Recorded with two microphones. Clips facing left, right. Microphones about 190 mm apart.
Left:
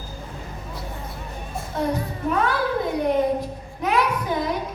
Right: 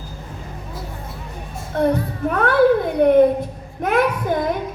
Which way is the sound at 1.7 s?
60° right (ahead or behind).